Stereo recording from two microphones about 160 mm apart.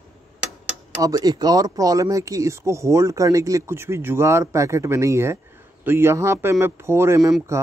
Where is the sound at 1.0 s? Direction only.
25° right (ahead or behind).